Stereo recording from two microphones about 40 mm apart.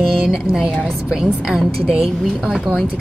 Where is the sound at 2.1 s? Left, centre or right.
Centre.